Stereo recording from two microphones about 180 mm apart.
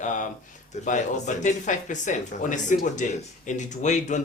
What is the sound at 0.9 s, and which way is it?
Speech, 45° left (ahead or behind).